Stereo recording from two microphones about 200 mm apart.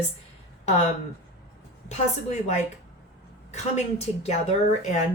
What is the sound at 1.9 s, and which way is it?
A woman's voice, 35° left (ahead or behind).